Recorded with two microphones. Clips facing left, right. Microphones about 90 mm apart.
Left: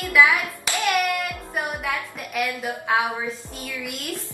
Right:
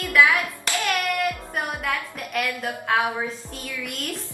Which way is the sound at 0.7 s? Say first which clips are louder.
Left 3 dB; 15° left (ahead or behind).